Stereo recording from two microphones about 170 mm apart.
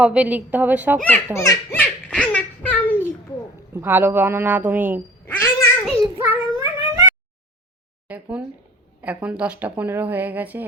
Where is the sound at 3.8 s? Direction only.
10° right (ahead or behind).